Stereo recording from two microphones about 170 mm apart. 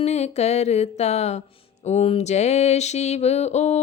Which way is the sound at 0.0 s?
40° left (ahead or behind).